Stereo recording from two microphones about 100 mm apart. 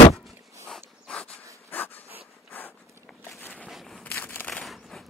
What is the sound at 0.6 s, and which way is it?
Dog, 5° left (ahead or behind).